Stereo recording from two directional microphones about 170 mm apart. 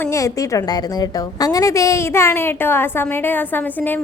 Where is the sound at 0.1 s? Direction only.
20° left (ahead or behind).